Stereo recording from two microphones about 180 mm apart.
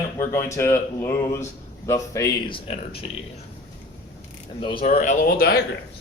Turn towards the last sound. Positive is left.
turn(degrees=55)  # may be behind; listen again after turning